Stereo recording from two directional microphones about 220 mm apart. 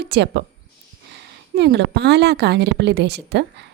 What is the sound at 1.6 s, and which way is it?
Speech, 50° right (ahead or behind).